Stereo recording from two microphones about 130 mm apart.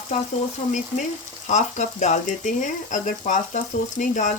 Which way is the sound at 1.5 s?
65° left (ahead or behind).